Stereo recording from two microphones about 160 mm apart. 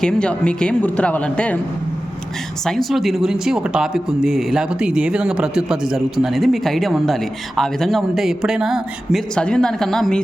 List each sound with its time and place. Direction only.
0.0 s speech: 5° left (ahead or behind)
2.6 s speech: centre (ahead or behind)